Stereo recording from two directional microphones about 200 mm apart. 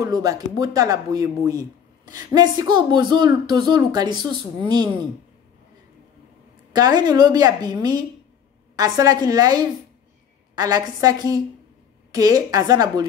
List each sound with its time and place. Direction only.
0.0 s speech: 15° right (ahead or behind)
6.7 s speech: 20° right (ahead or behind)